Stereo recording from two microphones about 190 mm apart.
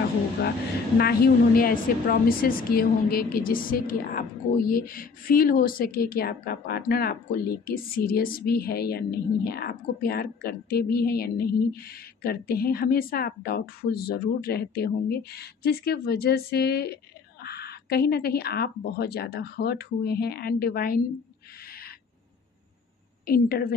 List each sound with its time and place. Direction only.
0.9 s a woman's voice: 55° left (ahead or behind)
23.2 s a woman's voice: 50° left (ahead or behind)